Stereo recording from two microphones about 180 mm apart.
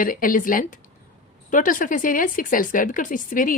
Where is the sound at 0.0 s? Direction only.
50° left (ahead or behind).